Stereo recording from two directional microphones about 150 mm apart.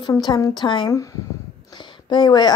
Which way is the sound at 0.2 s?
30° left (ahead or behind).